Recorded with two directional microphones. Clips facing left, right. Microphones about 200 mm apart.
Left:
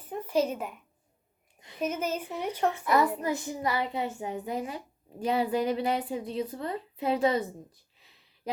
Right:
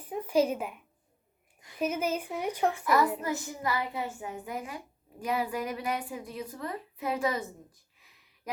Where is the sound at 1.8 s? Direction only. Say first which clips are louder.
Right 1 dB; 10° right (ahead or behind).